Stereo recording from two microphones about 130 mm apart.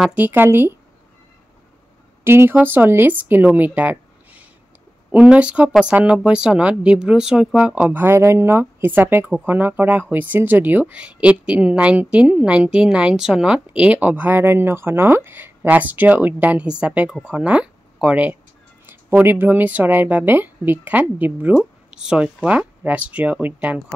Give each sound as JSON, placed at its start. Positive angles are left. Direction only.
{"t": 0.0, "sound": "a woman's voice", "side_deg": -10}
{"t": 2.2, "sound": "a woman's voice", "side_deg": -20}